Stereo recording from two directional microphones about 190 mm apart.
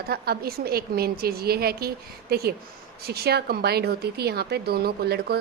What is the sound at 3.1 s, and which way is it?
A woman's voice, 55° right (ahead or behind).